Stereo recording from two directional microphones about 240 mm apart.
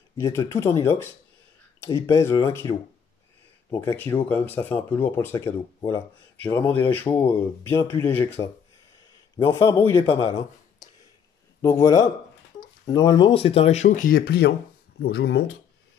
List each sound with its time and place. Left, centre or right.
0.2 s speech: centre
3.7 s speech: centre
11.6 s speech: centre; by 15.5 s left